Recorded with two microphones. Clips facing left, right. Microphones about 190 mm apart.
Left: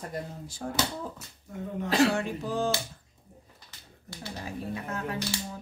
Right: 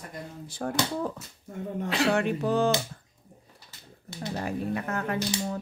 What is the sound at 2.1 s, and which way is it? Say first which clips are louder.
Speech: right 5 dB; 65° right (ahead or behind).